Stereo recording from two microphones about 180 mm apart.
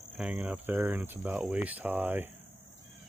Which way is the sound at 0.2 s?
10° right (ahead or behind).